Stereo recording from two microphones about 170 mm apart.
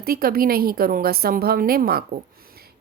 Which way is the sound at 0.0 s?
60° right (ahead or behind).